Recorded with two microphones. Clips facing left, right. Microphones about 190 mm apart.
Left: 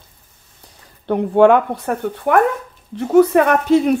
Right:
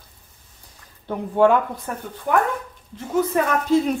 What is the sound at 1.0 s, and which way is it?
Speech, 70° left (ahead or behind).